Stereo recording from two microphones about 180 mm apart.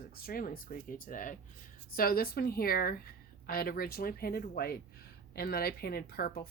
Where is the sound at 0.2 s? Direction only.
55° left (ahead or behind).